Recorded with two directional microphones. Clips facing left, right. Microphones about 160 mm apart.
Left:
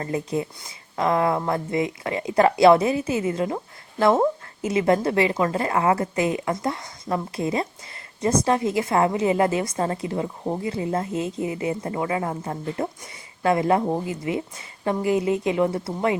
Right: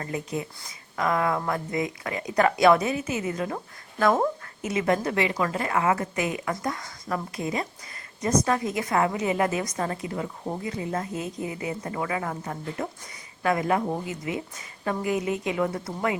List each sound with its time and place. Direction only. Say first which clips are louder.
0.0 s a woman's voice: left 5 dB; 30° left (ahead or behind)